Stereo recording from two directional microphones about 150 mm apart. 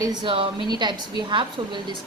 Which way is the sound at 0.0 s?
30° right (ahead or behind).